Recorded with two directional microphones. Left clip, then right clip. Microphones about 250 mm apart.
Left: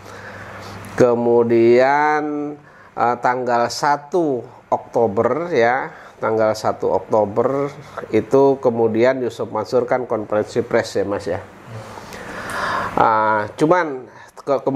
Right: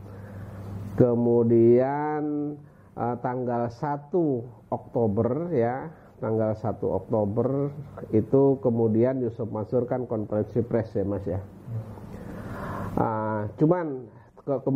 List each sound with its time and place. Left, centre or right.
0.9 s speech: centre
4.6 s speech: left
6.7 s speech: left
8.4 s speech: left
8.8 s speech: centre
9.4 s speech: left
12.1 s a sound: centre